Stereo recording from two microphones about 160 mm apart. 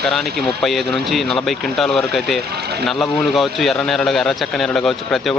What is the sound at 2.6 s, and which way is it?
Speech, 90° right.